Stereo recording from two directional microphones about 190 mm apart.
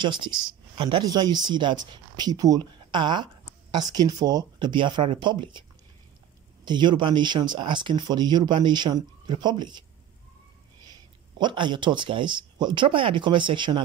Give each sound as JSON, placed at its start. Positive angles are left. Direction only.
{"t": 0.0, "sound": "speech", "side_deg": -25}
{"t": 11.3, "sound": "speech", "side_deg": -25}